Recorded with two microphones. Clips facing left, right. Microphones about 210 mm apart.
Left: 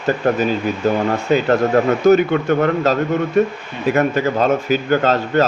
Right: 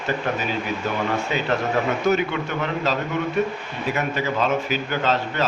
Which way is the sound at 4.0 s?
45° left (ahead or behind).